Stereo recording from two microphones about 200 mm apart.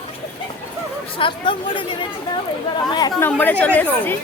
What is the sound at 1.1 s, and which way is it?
Speech, 25° left (ahead or behind).